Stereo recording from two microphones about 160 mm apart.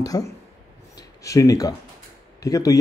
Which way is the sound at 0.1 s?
20° left (ahead or behind).